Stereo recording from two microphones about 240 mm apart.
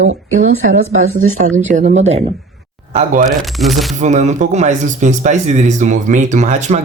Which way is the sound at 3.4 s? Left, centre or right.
Centre.